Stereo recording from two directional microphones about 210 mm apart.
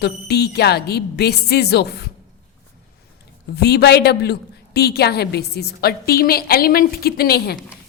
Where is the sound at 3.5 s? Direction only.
50° left (ahead or behind).